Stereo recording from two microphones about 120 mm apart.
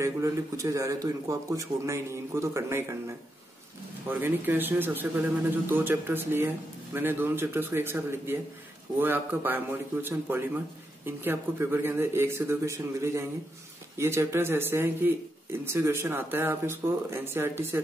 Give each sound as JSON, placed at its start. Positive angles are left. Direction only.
{"t": 0.0, "sound": "a man's voice", "side_deg": -25}
{"t": 4.1, "sound": "a man's voice", "side_deg": -15}